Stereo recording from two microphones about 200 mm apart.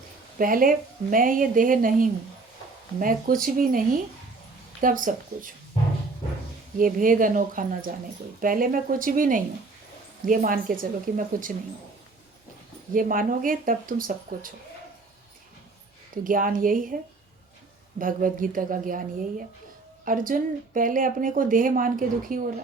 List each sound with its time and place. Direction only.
0.3 s a woman's voice: 45° right (ahead or behind)
6.7 s a woman's voice: 45° right (ahead or behind)
12.9 s a woman's voice: 45° right (ahead or behind)
16.2 s a woman's voice: 45° right (ahead or behind)
18.0 s a woman's voice: 45° right (ahead or behind)
20.1 s a woman's voice: 45° right (ahead or behind)